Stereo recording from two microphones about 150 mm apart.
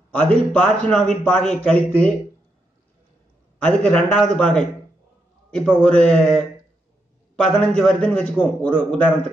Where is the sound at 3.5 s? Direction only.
10° left (ahead or behind).